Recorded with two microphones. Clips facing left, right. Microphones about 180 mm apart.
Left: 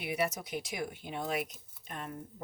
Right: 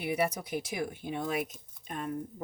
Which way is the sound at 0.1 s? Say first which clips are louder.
Right 3 dB; 55° right (ahead or behind).